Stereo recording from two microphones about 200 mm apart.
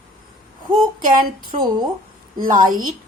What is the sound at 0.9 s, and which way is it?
Speech, 45° right (ahead or behind).